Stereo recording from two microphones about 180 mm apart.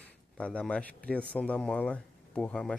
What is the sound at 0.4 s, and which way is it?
Speech, 5° left (ahead or behind).